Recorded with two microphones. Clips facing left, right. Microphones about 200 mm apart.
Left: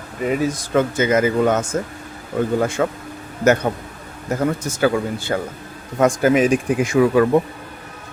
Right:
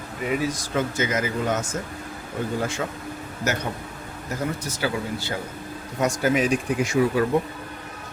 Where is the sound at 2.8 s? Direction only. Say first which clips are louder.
Left 9 dB; 70° left (ahead or behind).